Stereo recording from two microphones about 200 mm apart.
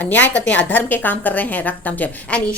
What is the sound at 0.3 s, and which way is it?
A woman's voice, 5° left (ahead or behind).